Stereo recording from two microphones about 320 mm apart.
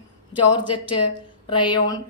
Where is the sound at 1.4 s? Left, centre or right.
Centre.